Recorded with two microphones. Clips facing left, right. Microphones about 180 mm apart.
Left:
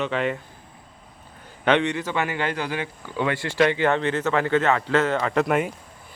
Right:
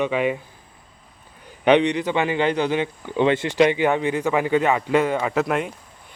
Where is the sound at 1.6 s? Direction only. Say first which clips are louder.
Right 4 dB; 15° right (ahead or behind).